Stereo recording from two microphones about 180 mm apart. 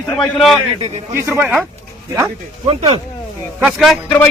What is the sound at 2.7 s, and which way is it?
Speech, 30° right (ahead or behind).